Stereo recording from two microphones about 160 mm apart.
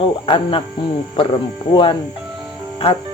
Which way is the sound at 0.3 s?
35° left (ahead or behind).